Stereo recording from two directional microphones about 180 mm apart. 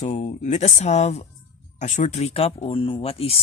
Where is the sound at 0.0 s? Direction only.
40° left (ahead or behind).